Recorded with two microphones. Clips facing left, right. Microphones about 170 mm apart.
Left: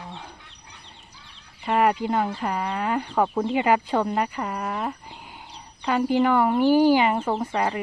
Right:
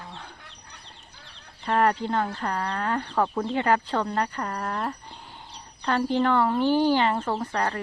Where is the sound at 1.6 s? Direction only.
10° left (ahead or behind).